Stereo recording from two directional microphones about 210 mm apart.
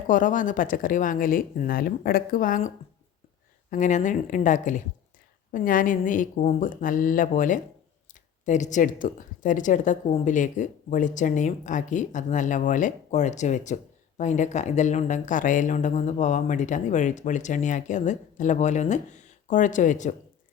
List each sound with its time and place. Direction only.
0.1 s speech: 40° left (ahead or behind)